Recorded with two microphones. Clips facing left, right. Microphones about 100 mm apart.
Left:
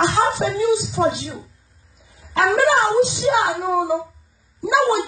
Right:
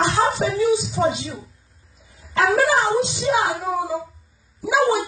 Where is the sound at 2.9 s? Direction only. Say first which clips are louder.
Left 3 dB; centre (ahead or behind).